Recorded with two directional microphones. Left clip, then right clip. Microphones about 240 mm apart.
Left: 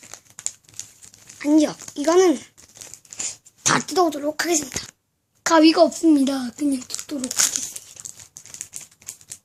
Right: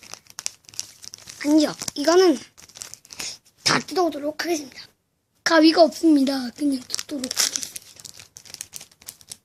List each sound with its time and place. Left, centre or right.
0.1 s crumpling: right
1.4 s a child's voice: centre
3.2 s a sound: centre
5.4 s a child's voice: centre
7.2 s crumpling: centre
8.0 s crumpling: right